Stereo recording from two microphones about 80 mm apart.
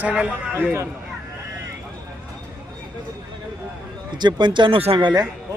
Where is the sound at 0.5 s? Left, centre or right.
Right.